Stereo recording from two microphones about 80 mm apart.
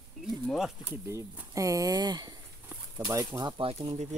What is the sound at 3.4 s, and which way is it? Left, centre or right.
Speech, right.